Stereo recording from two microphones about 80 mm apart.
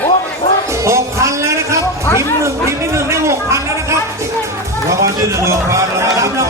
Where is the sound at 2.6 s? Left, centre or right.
Right.